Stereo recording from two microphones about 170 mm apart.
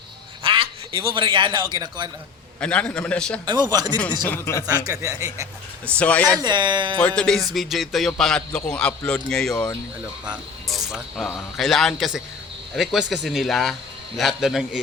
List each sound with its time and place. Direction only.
0.4 s a man's voice: 30° right (ahead or behind)
2.6 s a man's voice: 5° left (ahead or behind)
3.4 s a man's voice: 25° right (ahead or behind)
4.3 s a man's voice: 15° left (ahead or behind)
4.9 s a man's voice: 20° right (ahead or behind)
5.8 s a man's voice: 10° left (ahead or behind)
6.4 s a man's voice: 25° right (ahead or behind)
7.2 s speech: 5° left (ahead or behind)
10.2 s speech: 5° right (ahead or behind)